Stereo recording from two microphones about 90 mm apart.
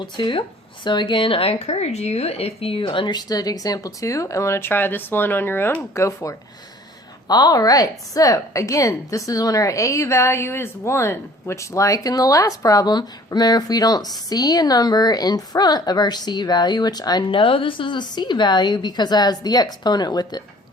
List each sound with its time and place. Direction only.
0.0 s speech: 65° left (ahead or behind)
3.2 s speech: 45° left (ahead or behind); by 5.8 s 25° left (ahead or behind)
5.9 s speech: 35° left (ahead or behind)
7.3 s a woman's voice: 50° left (ahead or behind)
17.3 s a woman's voice: 75° left (ahead or behind); by 20.4 s 50° left (ahead or behind)